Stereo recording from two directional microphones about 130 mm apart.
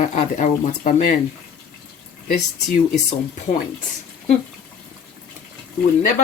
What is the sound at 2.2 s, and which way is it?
Speech, 75° left (ahead or behind).